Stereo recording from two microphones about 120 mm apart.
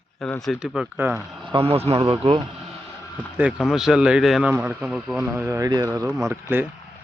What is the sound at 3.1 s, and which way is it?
Speech, 10° right (ahead or behind).